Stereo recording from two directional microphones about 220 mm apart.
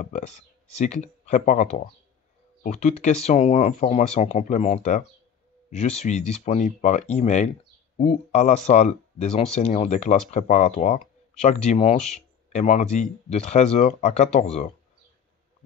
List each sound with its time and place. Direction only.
0.0 s speech: 30° left (ahead or behind)